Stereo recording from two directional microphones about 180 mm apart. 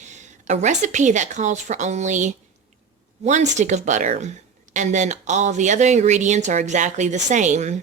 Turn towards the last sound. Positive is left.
turn(degrees=-40)  # may be behind; listen again after turning